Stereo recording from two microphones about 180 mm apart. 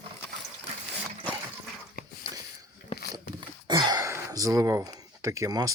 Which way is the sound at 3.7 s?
25° right (ahead or behind).